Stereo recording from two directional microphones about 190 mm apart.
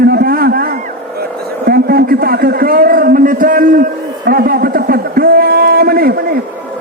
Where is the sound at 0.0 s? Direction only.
50° right (ahead or behind).